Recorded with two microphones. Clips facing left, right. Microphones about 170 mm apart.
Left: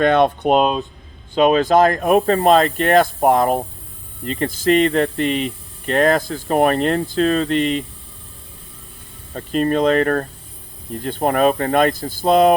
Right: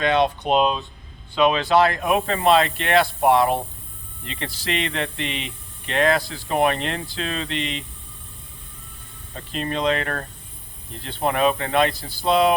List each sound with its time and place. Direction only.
0.0 s speech: 50° left (ahead or behind)
9.3 s speech: 45° left (ahead or behind)